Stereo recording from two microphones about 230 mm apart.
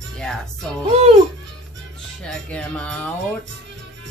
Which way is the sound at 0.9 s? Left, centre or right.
Right.